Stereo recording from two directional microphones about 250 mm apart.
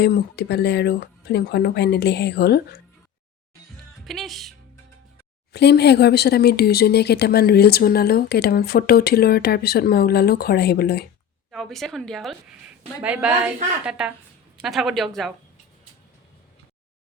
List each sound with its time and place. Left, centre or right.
0.0 s speech: left
4.0 s a woman's voice: centre
5.5 s speech: left
11.5 s a woman's voice: centre